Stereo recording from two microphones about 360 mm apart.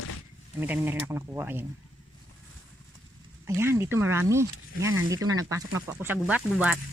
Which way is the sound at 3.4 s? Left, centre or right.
Centre.